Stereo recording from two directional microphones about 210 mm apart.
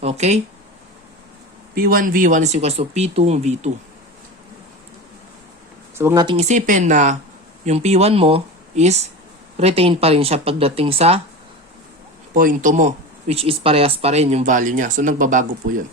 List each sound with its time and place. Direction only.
0.0 s speech: 30° right (ahead or behind)
1.7 s speech: 45° right (ahead or behind)
6.0 s speech: 10° right (ahead or behind)
6.2 s speech: 30° right (ahead or behind)
12.3 s speech: 40° right (ahead or behind)